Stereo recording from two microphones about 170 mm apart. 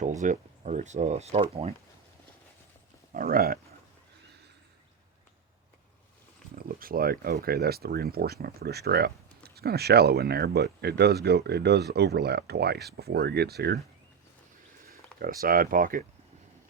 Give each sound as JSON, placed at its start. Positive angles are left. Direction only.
{"t": 0.0, "sound": "speech", "side_deg": -45}
{"t": 3.1, "sound": "speech", "side_deg": -55}
{"t": 6.6, "sound": "speech", "side_deg": -60}
{"t": 14.8, "sound": "speech", "side_deg": -60}